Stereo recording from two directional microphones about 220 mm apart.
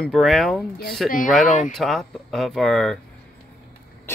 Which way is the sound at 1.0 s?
40° left (ahead or behind).